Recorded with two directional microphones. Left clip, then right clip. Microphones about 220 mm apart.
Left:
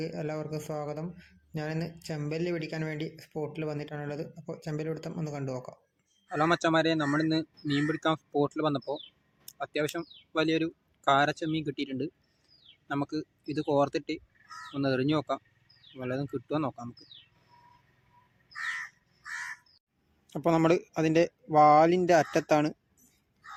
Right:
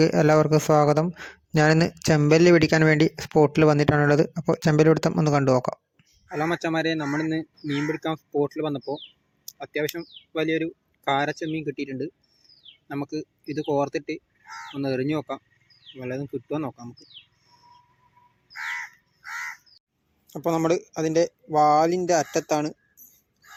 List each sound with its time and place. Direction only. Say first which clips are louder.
0.0 s speech: right 17 dB; 40° right (ahead or behind)
6.2 s speech: even; centre (ahead or behind)
20.2 s speech: right 2 dB; 20° left (ahead or behind)